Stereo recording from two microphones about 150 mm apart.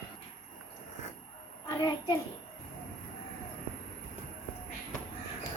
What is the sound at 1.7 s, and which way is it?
Speech, 25° left (ahead or behind).